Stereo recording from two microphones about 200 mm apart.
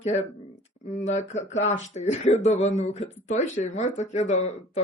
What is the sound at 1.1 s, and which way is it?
Speech, 35° left (ahead or behind).